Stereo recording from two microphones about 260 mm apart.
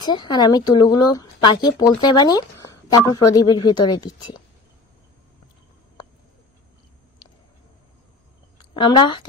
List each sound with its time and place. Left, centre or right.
0.0 s speech: centre
7.2 s a sound: centre
8.7 s speech: centre